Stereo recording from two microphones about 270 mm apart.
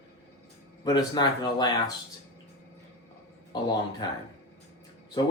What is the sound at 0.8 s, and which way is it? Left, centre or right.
Speech, centre.